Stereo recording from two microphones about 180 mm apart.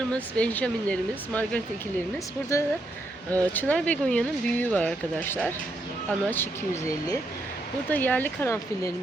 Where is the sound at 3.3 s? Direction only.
10° left (ahead or behind).